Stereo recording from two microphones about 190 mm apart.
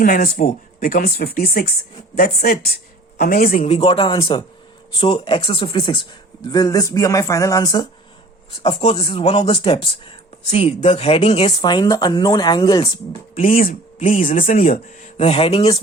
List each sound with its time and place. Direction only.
0.0 s speech: 45° left (ahead or behind); by 12.9 s 25° left (ahead or behind)
13.3 s speech: 45° left (ahead or behind)